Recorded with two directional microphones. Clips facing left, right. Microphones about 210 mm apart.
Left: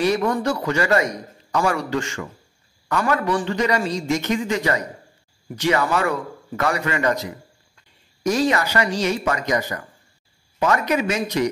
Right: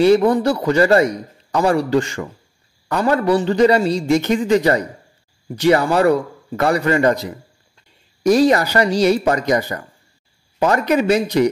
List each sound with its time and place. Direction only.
0.0 s a man's voice: 30° right (ahead or behind)
8.2 s a man's voice: 35° right (ahead or behind)